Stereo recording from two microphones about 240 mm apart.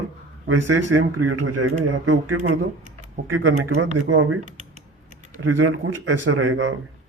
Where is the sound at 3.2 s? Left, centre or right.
Right.